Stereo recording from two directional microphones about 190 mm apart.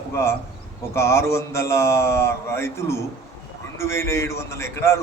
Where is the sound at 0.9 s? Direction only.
15° left (ahead or behind).